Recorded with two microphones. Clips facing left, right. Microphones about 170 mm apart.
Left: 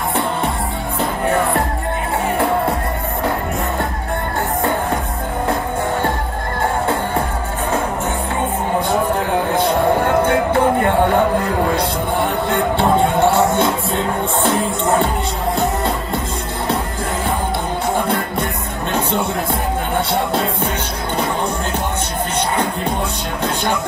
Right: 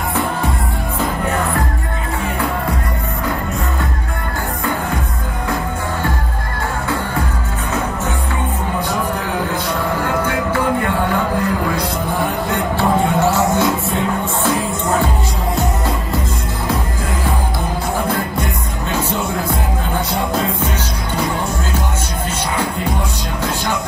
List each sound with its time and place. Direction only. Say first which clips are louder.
10.2 s music: left 3 dB; 30° left (ahead or behind)
12.4 s music: left 2 dB; 25° left (ahead or behind)
20.1 s music: left 1 dB; 30° left (ahead or behind)